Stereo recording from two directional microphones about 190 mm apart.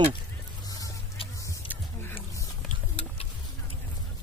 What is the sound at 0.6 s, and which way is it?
Music, 20° left (ahead or behind).